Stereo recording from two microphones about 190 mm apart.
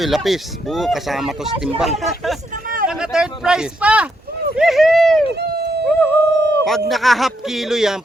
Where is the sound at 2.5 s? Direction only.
45° right (ahead or behind).